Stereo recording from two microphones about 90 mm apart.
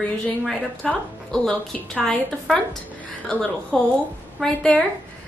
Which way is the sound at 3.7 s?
10° left (ahead or behind).